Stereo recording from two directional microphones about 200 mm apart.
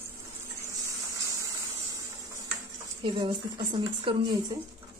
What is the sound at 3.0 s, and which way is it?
A woman's voice, 25° right (ahead or behind).